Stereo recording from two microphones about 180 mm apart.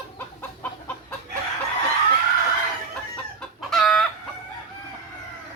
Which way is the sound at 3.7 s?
5° left (ahead or behind).